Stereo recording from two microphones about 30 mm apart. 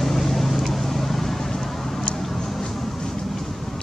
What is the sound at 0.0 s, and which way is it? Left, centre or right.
Vehicle, centre.